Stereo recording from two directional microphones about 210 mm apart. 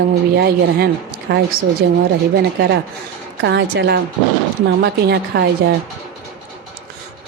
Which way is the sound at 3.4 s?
55° right (ahead or behind).